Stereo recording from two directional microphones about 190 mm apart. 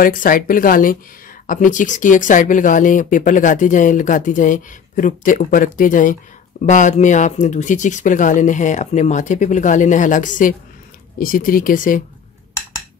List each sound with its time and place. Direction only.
0.0 s speech: 45° left (ahead or behind)